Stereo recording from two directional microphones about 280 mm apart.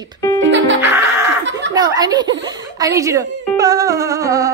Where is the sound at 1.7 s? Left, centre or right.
Centre.